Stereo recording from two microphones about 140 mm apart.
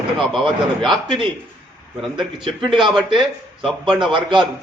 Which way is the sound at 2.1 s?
35° right (ahead or behind).